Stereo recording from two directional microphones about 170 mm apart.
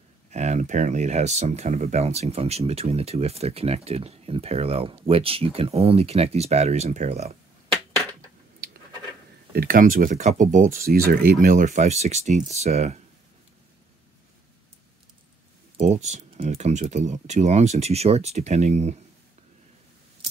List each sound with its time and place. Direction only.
0.3 s speech: 40° right (ahead or behind)
9.5 s speech: 60° right (ahead or behind); by 13.0 s 40° right (ahead or behind)
15.8 s speech: 45° right (ahead or behind)